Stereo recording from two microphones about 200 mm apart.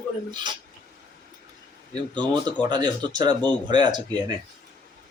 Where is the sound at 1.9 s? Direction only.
20° right (ahead or behind).